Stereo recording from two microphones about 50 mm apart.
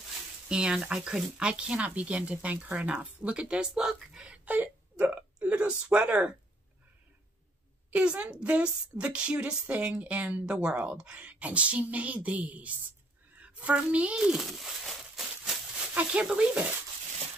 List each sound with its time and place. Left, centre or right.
0.5 s speech: centre
4.3 s speech: right
7.9 s speech: right
13.4 s a sound: right
13.8 s speech: right
14.1 s speech: centre
14.4 s a sound: centre
16.1 s speech: right